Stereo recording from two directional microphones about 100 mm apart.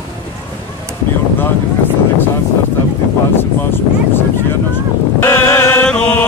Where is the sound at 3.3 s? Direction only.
20° left (ahead or behind).